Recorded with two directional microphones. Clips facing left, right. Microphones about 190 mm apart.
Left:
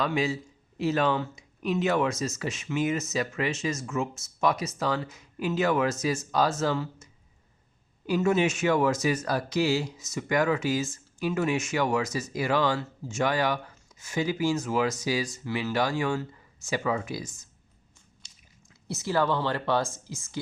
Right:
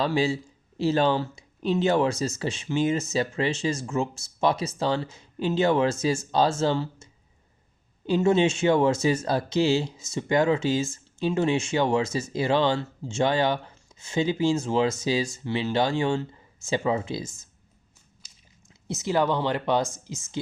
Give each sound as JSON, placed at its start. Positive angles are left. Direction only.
{"t": 0.0, "sound": "a man's voice", "side_deg": -30}
{"t": 18.2, "sound": "biting", "side_deg": -5}
{"t": 18.9, "sound": "speech", "side_deg": -20}